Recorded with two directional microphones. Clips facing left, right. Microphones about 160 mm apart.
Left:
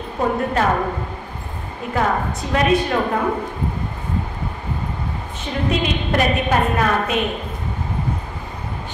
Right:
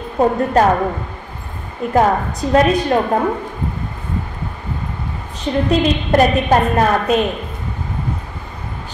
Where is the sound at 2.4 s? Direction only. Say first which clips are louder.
Right 10 dB; 40° right (ahead or behind).